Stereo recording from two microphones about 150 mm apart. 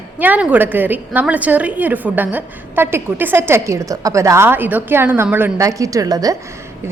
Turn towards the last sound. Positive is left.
turn(degrees=-25)  # may be behind; listen again after turning